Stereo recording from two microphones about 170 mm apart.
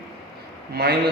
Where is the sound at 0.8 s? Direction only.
65° right (ahead or behind).